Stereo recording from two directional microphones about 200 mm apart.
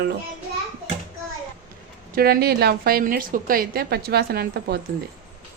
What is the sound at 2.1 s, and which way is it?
A woman's voice, 45° right (ahead or behind).